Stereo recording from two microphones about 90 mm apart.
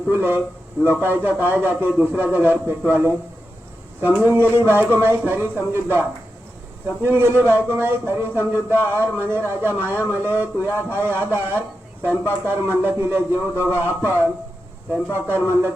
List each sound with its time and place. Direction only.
0.1 s speech: 25° right (ahead or behind)
15.1 s speech: 25° right (ahead or behind)